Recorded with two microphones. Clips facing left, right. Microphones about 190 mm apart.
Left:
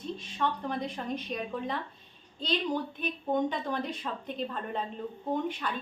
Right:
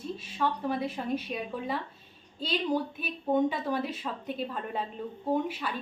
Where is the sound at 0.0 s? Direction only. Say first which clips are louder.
Right 1 dB; 5° right (ahead or behind).